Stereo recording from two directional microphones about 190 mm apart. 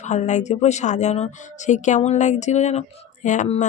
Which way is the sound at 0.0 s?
40° left (ahead or behind).